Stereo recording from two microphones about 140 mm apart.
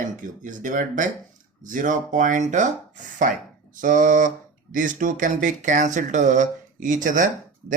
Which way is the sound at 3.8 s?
70° right (ahead or behind).